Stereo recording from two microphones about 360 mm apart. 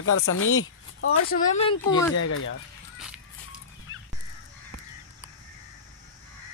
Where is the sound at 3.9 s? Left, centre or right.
Left.